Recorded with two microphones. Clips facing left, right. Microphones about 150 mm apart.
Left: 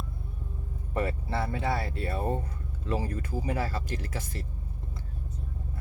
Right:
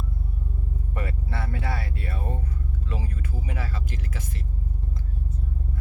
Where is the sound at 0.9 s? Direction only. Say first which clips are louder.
Left 5 dB; 30° left (ahead or behind).